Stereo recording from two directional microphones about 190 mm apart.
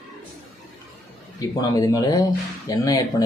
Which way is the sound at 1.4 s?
20° left (ahead or behind).